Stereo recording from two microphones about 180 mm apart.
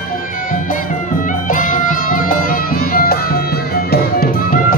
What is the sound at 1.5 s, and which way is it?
Music, 45° left (ahead or behind).